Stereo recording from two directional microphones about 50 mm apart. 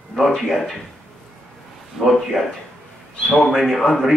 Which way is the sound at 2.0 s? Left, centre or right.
Centre.